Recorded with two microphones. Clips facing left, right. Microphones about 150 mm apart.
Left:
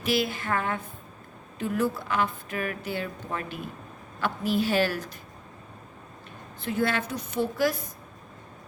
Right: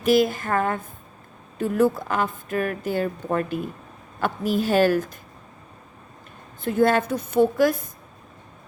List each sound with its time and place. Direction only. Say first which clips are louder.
0.0 s a woman's voice: right 8 dB; 45° right (ahead or behind)
6.7 s a woman's voice: right 8 dB; 45° right (ahead or behind)